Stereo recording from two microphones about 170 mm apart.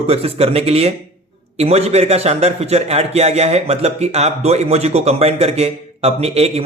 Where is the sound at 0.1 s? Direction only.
35° right (ahead or behind).